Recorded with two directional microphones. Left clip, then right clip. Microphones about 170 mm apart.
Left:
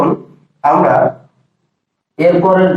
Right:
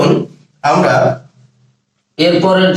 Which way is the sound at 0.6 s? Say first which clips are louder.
Left 1 dB; 40° right (ahead or behind).